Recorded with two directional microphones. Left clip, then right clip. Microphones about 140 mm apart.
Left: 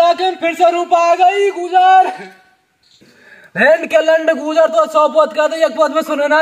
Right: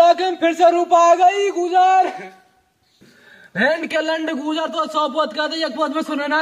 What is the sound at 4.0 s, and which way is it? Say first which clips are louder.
A man's voice: left 9 dB; 10° right (ahead or behind).